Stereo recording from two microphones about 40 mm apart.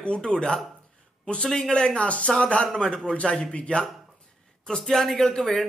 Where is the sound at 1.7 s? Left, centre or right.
Left.